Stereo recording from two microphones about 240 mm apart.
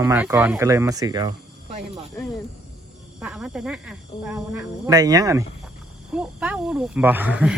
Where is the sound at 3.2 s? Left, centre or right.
Centre.